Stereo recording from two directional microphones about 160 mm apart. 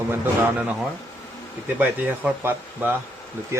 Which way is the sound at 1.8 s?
10° right (ahead or behind).